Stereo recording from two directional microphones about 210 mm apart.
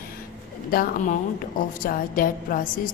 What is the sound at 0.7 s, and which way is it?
Music, 45° left (ahead or behind).